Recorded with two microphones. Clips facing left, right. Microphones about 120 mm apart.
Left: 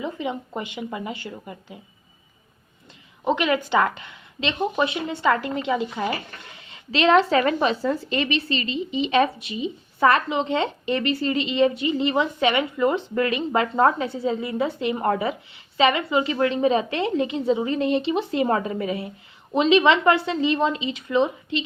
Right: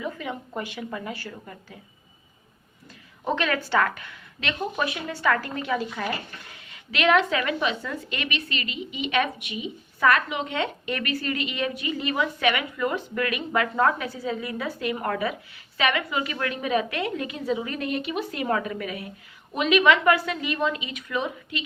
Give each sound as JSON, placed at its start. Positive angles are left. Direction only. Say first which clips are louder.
{"t": 0.0, "sound": "a woman's voice", "louder": "left 4 dB", "side_deg": 20}
{"t": 3.2, "sound": "a woman's voice", "louder": "left 4 dB", "side_deg": 15}